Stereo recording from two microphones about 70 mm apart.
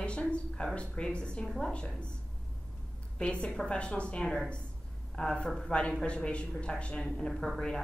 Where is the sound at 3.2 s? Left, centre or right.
Centre.